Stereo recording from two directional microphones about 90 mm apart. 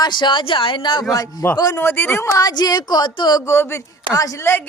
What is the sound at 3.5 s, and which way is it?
A man's voice, 30° left (ahead or behind).